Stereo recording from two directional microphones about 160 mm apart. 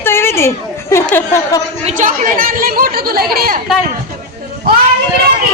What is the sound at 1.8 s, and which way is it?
A woman's voice, 50° right (ahead or behind).